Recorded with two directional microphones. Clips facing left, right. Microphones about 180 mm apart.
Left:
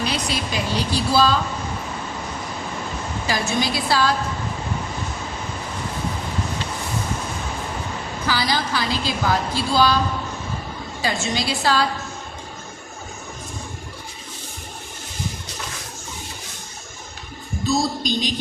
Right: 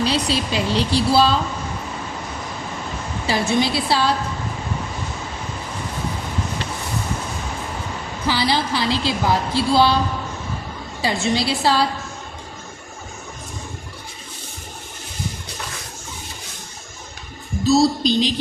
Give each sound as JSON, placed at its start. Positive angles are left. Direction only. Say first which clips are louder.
{"t": 0.0, "sound": "speech", "louder": "right 4 dB", "side_deg": -30}
{"t": 3.2, "sound": "speech", "louder": "right 4 dB", "side_deg": -30}
{"t": 8.3, "sound": "speech", "louder": "right 3 dB", "side_deg": -25}
{"t": 11.0, "sound": "speech", "louder": "right 4 dB", "side_deg": -30}
{"t": 17.7, "sound": "music", "louder": "right 6 dB", "side_deg": -30}